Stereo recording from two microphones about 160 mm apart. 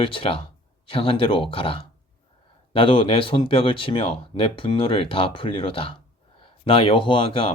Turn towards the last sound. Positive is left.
turn(degrees=35)  # may be behind; listen again after turning